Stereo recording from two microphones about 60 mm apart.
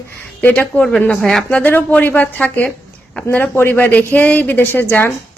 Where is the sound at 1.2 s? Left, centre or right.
Centre.